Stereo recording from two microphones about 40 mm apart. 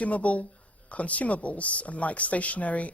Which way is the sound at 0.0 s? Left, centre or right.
Left.